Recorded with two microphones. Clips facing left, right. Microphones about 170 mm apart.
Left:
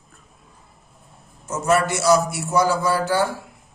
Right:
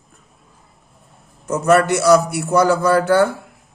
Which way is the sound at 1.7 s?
60° right (ahead or behind).